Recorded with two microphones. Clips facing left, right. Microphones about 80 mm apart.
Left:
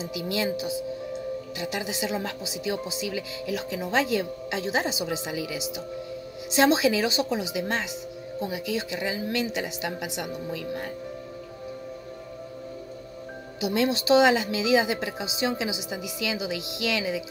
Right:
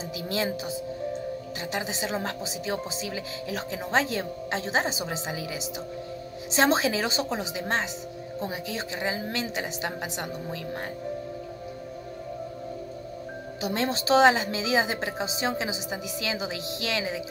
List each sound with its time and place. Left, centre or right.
0.1 s speech: right
13.6 s speech: right